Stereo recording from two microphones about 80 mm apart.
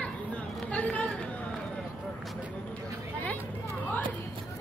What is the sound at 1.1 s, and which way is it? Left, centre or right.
Run, centre.